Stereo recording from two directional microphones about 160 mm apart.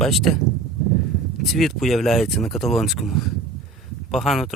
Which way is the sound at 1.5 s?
Centre (ahead or behind).